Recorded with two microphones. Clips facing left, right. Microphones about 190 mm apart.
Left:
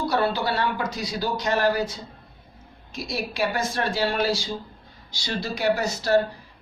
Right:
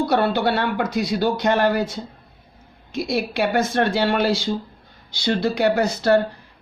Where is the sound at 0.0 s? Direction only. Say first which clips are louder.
Right 5 dB; 60° right (ahead or behind).